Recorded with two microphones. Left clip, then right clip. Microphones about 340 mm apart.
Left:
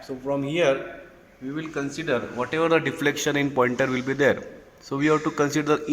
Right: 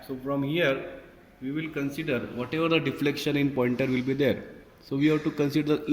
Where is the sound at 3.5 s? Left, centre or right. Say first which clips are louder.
Left 5 dB; left.